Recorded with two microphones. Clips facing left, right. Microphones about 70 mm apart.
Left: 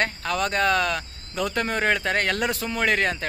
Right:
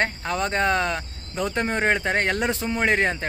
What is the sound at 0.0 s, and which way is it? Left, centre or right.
Speech, right.